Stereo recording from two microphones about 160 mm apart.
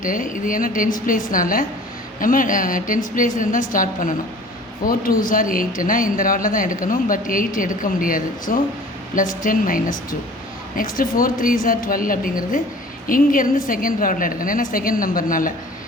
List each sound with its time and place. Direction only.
0.0 s speech: 55° left (ahead or behind)